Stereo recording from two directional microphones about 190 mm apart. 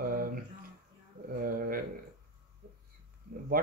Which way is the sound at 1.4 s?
50° right (ahead or behind).